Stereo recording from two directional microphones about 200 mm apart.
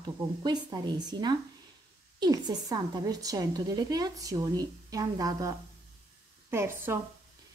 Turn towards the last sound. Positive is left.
turn(degrees=-10)  # may be behind; listen again after turning